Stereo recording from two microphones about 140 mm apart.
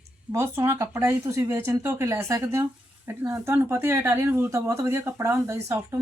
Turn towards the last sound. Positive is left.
turn(degrees=-20)  # may be behind; listen again after turning